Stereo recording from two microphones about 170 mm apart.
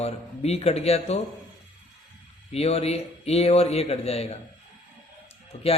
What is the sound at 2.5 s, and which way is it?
Speech, 35° left (ahead or behind).